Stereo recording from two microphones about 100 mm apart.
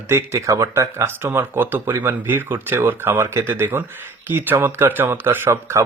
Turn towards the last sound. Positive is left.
turn(degrees=-25)  # may be behind; listen again after turning